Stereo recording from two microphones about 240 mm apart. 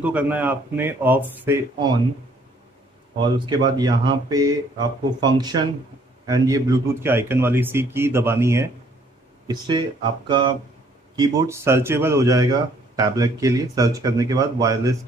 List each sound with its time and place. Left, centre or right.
0.0 s speech: centre
3.2 s speech: centre